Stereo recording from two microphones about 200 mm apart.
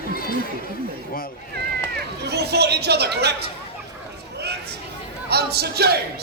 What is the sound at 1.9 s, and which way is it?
Speech, 55° right (ahead or behind).